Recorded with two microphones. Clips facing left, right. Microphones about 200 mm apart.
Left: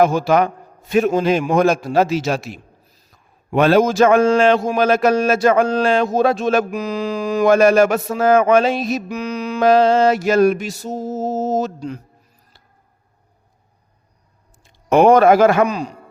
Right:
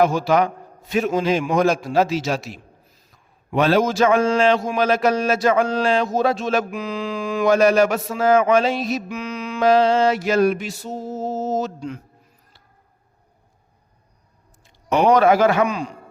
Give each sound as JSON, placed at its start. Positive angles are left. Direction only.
{"t": 0.0, "sound": "a man's voice", "side_deg": 50}
{"t": 14.8, "sound": "a man's voice", "side_deg": 50}